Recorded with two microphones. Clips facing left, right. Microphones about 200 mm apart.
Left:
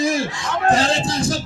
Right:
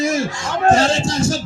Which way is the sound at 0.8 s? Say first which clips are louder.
Right 3 dB; 35° left (ahead or behind).